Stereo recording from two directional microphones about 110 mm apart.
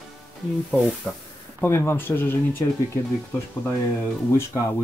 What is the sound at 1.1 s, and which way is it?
Speech, 10° left (ahead or behind).